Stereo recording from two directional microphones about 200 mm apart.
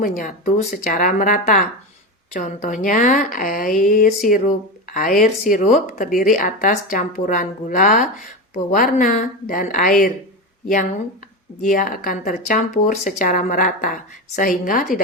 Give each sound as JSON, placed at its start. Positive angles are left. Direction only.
{"t": 0.0, "sound": "speech", "side_deg": 40}
{"t": 11.6, "sound": "speech", "side_deg": 40}